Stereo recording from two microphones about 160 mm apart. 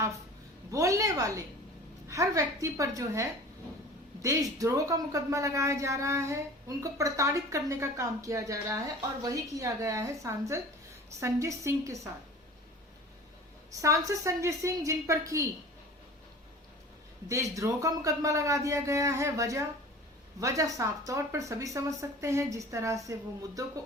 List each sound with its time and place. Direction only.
0.7 s speech: 20° right (ahead or behind)
13.7 s speech: 20° right (ahead or behind)
17.2 s speech: 20° right (ahead or behind)